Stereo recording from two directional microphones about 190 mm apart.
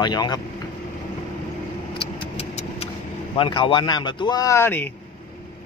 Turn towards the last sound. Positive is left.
turn(degrees=10)  # may be behind; listen again after turning